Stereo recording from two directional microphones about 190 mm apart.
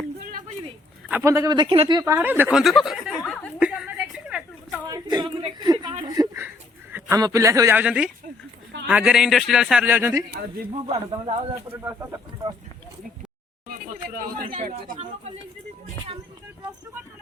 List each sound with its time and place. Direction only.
1.0 s a man's voice: 10° right (ahead or behind); by 2.0 s 30° right (ahead or behind)
2.0 s a woman's voice: 10° right (ahead or behind); by 3.5 s 5° left (ahead or behind)
3.6 s a sound: 5° right (ahead or behind)
4.9 s a sound: 20° right (ahead or behind)
6.9 s a man's voice: 15° right (ahead or behind)
10.7 s a man's voice: 25° right (ahead or behind)
11.7 s speech: 15° right (ahead or behind)
13.7 s speech: 50° right (ahead or behind)